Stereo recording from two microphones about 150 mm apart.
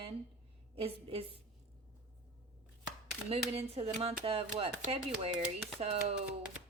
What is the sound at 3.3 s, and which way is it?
Speech, 45° right (ahead or behind).